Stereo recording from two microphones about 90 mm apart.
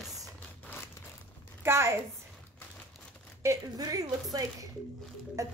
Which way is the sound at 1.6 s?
30° right (ahead or behind).